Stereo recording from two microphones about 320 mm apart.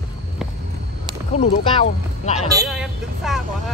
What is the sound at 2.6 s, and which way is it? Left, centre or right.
Vehicle, centre.